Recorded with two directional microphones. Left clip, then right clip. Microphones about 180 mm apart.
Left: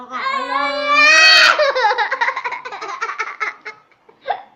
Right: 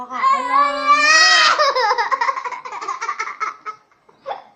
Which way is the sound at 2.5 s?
20° right (ahead or behind).